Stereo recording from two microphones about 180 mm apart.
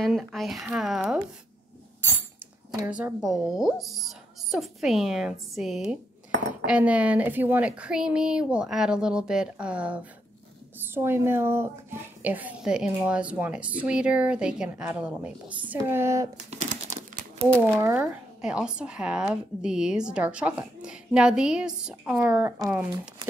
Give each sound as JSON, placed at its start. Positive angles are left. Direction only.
{"t": 0.0, "sound": "a woman's voice", "side_deg": 0}
{"t": 2.9, "sound": "a woman's voice", "side_deg": -5}
{"t": 16.4, "sound": "crumpling", "side_deg": -40}
{"t": 17.6, "sound": "a woman's voice", "side_deg": -10}